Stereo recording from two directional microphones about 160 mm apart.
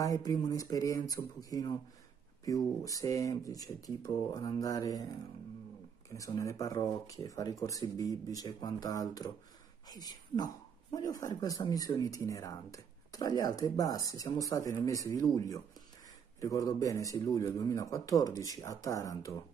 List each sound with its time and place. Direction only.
0.0 s speech: 20° left (ahead or behind)
6.1 s speech: 20° left (ahead or behind)